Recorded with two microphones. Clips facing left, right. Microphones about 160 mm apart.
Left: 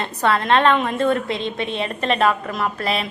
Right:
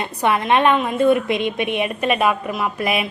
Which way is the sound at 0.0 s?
15° right (ahead or behind).